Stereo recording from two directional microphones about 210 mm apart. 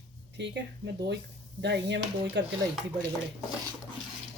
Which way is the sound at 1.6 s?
55° right (ahead or behind).